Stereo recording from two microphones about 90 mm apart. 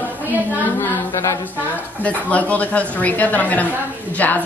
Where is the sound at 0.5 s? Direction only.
25° left (ahead or behind).